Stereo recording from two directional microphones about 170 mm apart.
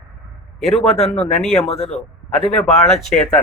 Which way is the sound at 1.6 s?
40° left (ahead or behind).